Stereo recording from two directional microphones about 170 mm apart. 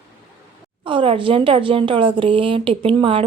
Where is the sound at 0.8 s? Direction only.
30° right (ahead or behind).